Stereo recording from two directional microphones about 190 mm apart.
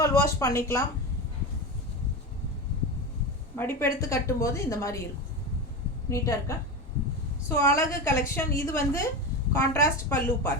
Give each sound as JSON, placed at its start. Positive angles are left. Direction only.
{"t": 0.0, "sound": "a sound", "side_deg": 15}
{"t": 0.3, "sound": "a woman's voice", "side_deg": 15}
{"t": 3.5, "sound": "a woman's voice", "side_deg": 10}
{"t": 6.1, "sound": "a woman's voice", "side_deg": 15}